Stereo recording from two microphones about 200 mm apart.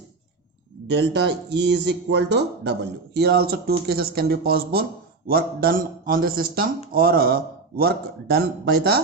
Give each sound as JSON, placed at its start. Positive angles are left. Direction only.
{"t": 0.9, "sound": "speech", "side_deg": -55}